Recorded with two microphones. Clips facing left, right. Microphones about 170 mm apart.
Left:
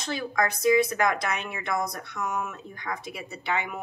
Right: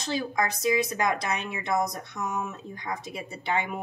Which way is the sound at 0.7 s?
20° right (ahead or behind).